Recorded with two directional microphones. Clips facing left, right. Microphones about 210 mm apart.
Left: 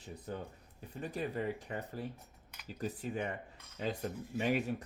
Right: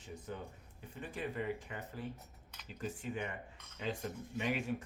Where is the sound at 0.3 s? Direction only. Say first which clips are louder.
Left 4 dB; 35° left (ahead or behind).